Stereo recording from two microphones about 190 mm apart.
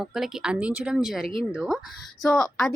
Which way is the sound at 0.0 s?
Centre (ahead or behind).